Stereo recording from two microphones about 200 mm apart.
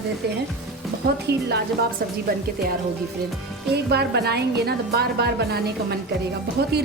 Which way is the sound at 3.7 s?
55° right (ahead or behind).